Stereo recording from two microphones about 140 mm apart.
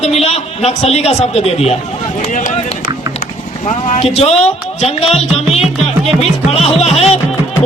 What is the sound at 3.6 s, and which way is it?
A man's voice, 55° left (ahead or behind).